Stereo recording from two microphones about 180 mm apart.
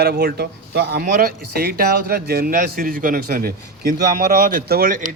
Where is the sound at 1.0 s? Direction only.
55° right (ahead or behind).